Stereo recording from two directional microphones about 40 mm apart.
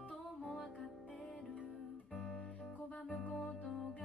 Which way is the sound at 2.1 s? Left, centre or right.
Left.